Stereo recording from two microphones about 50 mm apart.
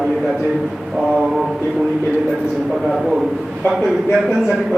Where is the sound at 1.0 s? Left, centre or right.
Centre.